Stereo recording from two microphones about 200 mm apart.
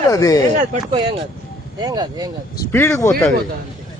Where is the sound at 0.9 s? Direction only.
25° right (ahead or behind).